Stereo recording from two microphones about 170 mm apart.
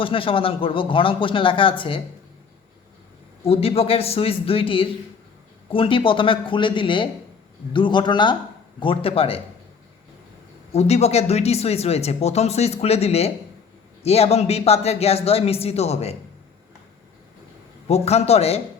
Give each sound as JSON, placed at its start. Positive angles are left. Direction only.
{"t": 0.0, "sound": "speech", "side_deg": 30}
{"t": 3.4, "sound": "a man's voice", "side_deg": 35}
{"t": 10.7, "sound": "speech", "side_deg": 40}
{"t": 17.8, "sound": "speech", "side_deg": 40}